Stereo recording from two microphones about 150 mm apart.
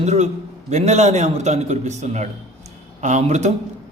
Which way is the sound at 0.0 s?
45° right (ahead or behind).